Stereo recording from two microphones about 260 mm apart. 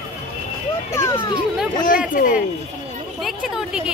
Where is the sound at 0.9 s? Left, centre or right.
Centre.